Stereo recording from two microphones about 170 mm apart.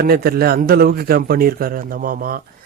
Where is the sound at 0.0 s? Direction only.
65° right (ahead or behind).